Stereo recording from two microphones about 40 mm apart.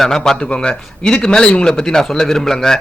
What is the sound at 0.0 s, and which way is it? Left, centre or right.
Speech, centre.